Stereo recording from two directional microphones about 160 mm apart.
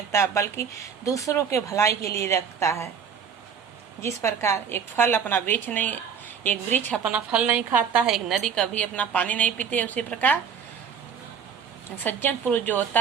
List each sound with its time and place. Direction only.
0.1 s speech: 20° left (ahead or behind)
4.0 s a woman's voice: 15° left (ahead or behind)
7.0 s a woman's voice: 5° right (ahead or behind)
12.0 s a woman's voice: 10° left (ahead or behind)